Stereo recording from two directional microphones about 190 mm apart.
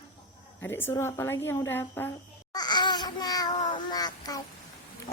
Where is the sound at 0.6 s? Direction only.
10° left (ahead or behind).